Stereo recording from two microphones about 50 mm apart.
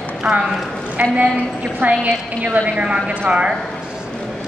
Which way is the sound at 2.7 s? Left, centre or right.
Right.